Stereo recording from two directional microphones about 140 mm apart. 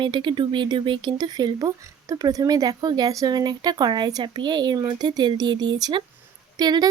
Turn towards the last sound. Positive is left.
turn(degrees=-30)  # may be behind; listen again after turning